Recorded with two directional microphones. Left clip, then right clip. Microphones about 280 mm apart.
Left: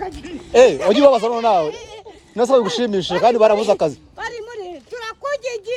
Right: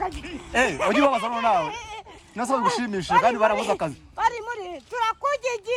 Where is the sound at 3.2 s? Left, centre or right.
Right.